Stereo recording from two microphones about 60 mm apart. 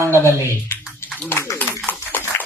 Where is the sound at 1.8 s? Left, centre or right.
Left.